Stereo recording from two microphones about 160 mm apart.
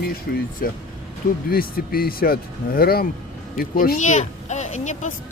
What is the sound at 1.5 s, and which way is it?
Speech, 70° left (ahead or behind).